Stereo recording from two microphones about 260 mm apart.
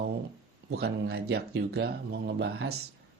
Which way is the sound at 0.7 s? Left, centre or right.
Right.